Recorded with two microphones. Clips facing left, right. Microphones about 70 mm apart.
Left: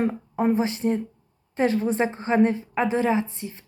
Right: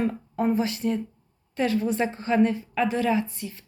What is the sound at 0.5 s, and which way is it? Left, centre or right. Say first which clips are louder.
A woman's voice: left 2 dB; left.